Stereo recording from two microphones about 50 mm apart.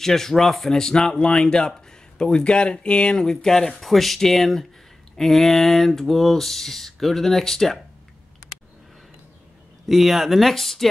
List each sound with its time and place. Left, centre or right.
0.0 s speech: centre
9.8 s speech: centre